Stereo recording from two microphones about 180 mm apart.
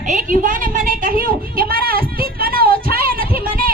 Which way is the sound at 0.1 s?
50° right (ahead or behind).